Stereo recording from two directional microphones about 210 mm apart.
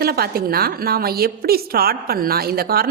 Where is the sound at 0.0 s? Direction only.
45° right (ahead or behind).